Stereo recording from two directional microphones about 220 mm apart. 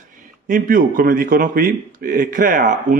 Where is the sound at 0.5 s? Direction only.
40° right (ahead or behind).